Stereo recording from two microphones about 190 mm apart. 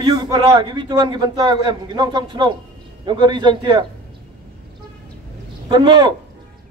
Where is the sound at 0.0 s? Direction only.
20° right (ahead or behind).